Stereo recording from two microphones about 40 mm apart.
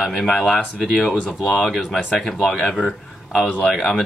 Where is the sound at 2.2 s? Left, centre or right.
Centre.